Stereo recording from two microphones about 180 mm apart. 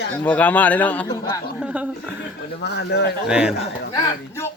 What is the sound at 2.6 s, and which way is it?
Speech, 70° left (ahead or behind).